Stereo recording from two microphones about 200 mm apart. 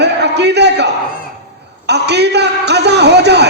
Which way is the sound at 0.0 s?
60° right (ahead or behind).